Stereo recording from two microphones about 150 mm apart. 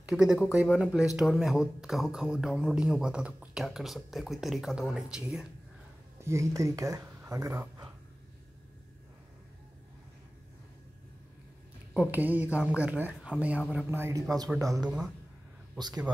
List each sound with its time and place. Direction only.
0.0 s speech: 5° right (ahead or behind)
6.1 s speech: 20° right (ahead or behind)
11.9 s speech: 10° right (ahead or behind)